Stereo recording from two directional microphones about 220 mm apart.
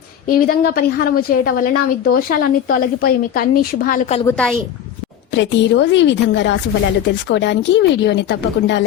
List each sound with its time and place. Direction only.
0.3 s a woman's voice: 40° left (ahead or behind)
4.3 s a woman's voice: 5° left (ahead or behind)
5.3 s speech: 55° left (ahead or behind)